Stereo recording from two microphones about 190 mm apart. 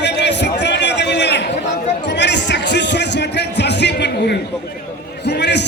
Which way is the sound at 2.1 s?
65° left (ahead or behind).